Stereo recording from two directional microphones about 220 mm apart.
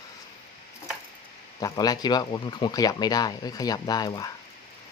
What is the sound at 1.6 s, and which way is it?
Speech, 15° left (ahead or behind).